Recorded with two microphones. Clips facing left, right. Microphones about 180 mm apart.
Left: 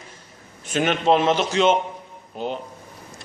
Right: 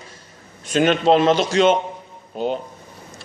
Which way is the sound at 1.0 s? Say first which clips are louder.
Right 1 dB; 35° right (ahead or behind).